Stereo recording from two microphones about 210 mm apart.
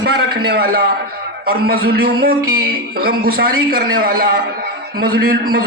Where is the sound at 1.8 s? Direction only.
50° right (ahead or behind).